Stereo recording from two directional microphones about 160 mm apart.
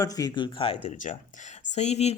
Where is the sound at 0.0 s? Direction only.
20° left (ahead or behind).